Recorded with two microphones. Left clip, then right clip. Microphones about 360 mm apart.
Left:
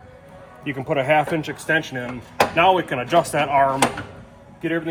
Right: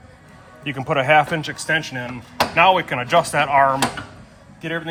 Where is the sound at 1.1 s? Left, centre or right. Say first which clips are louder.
Right 4 dB; centre.